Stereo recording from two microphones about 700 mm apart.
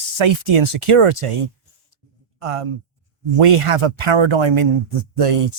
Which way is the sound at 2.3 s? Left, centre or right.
Right.